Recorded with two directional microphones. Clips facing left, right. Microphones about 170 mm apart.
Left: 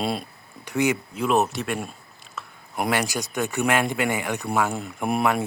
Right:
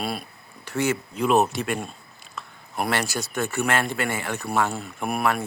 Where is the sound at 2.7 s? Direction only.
15° left (ahead or behind).